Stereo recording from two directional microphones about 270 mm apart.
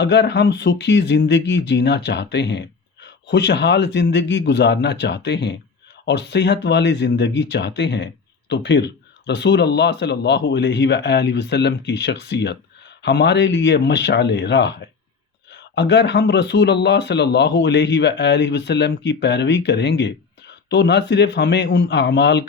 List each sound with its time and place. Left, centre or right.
0.0 s speech: left